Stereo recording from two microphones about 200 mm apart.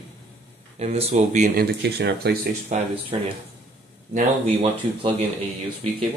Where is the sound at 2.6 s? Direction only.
30° right (ahead or behind).